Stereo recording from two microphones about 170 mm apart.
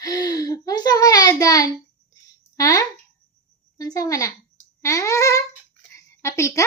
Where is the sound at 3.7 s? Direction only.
20° left (ahead or behind).